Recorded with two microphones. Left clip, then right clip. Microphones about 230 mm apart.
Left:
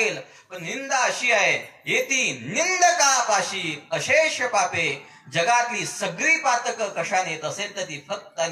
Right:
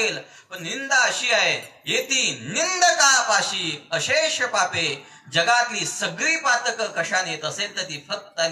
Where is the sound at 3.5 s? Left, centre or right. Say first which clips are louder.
Right 2 dB; right.